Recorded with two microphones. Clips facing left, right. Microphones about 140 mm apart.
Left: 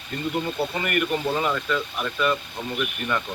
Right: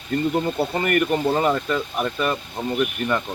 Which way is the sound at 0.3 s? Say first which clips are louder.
Right 4 dB; 40° right (ahead or behind).